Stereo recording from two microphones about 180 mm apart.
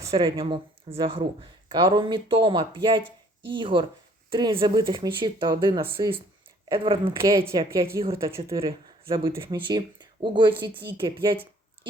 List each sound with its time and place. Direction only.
0.1 s speech: 30° right (ahead or behind)
7.2 s speech: 15° right (ahead or behind)
9.0 s speech: 30° right (ahead or behind)